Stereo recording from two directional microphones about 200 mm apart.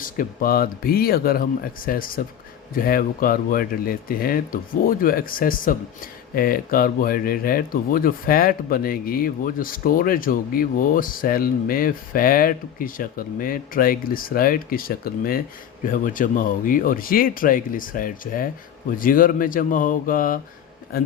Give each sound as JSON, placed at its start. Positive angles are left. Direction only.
{"t": 0.0, "sound": "speech", "side_deg": 45}